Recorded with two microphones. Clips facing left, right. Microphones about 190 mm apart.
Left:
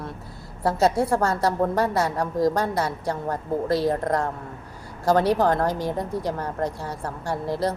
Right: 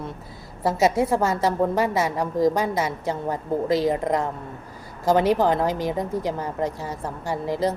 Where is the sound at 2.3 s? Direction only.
15° right (ahead or behind).